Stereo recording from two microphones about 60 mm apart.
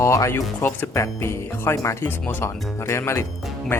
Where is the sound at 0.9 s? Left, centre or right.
Left.